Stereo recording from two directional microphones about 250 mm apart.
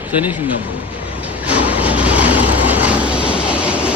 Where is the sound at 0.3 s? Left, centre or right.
Centre.